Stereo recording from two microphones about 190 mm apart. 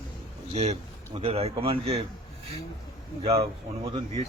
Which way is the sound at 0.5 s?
35° right (ahead or behind).